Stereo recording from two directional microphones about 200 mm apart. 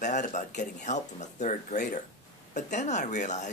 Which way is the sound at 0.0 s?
35° left (ahead or behind).